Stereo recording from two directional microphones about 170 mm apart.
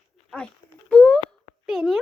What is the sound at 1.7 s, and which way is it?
Speech, centre (ahead or behind).